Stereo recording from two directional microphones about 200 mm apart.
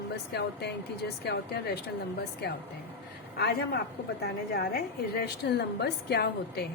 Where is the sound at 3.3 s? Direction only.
50° left (ahead or behind).